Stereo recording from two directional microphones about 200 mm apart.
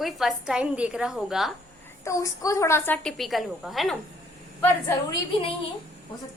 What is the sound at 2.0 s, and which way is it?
A woman's voice, 15° left (ahead or behind).